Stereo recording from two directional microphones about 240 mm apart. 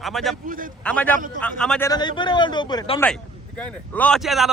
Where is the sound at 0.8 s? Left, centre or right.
Centre.